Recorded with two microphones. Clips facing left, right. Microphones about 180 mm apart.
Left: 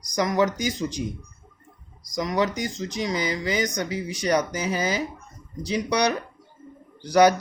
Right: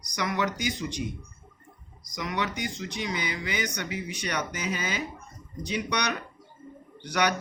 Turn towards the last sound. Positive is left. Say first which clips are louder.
# left 10 dB
turn(degrees=40)  # may be behind; listen again after turning